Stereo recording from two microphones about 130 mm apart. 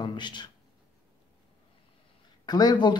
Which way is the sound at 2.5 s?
35° left (ahead or behind).